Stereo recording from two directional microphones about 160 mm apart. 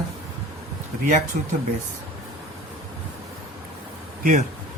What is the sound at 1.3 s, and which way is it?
Speech, 55° right (ahead or behind).